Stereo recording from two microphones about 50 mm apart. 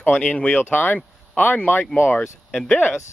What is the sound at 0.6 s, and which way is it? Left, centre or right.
Speech, left.